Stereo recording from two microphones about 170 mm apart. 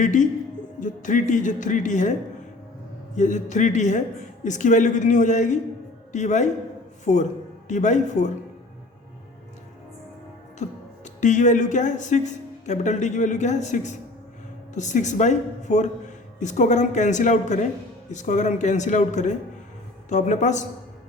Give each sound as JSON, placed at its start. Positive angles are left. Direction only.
{"t": 0.0, "sound": "speech", "side_deg": 45}
{"t": 3.2, "sound": "a man's voice", "side_deg": 45}
{"t": 10.6, "sound": "speech", "side_deg": 45}